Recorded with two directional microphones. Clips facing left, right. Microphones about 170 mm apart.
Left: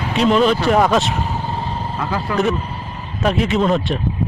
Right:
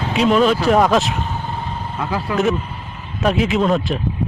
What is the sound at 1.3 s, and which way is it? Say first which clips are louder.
Vehicle: left 2 dB; 35° left (ahead or behind).